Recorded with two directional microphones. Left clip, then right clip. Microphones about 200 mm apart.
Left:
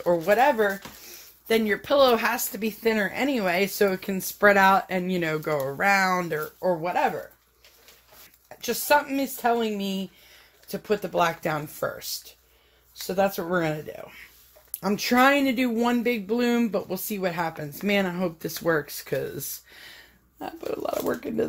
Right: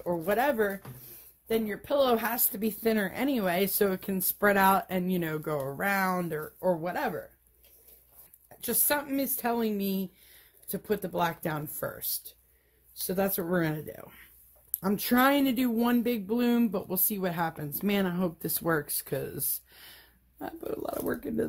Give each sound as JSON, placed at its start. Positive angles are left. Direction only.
{"t": 0.2, "sound": "a woman's voice", "side_deg": -15}
{"t": 1.5, "sound": "speech", "side_deg": 10}
{"t": 1.9, "sound": "a woman's voice", "side_deg": -10}
{"t": 2.1, "sound": "a woman's voice", "side_deg": -25}
{"t": 6.6, "sound": "speech", "side_deg": -25}
{"t": 8.5, "sound": "speech", "side_deg": -30}
{"t": 10.7, "sound": "a woman's voice", "side_deg": -20}
{"t": 12.9, "sound": "speech", "side_deg": -35}